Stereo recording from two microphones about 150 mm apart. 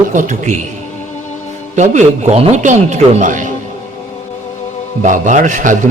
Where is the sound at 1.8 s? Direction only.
50° right (ahead or behind).